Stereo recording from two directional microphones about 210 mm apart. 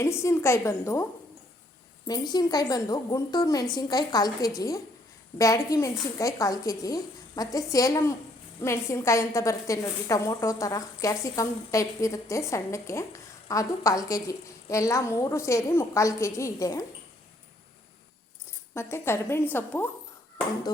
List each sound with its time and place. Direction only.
0.0 s a woman's voice: 15° left (ahead or behind)
2.0 s a woman's voice: 20° left (ahead or behind)
18.7 s a woman's voice: 10° left (ahead or behind)